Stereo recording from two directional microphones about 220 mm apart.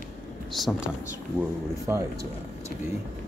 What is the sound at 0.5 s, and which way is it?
Speech, centre (ahead or behind).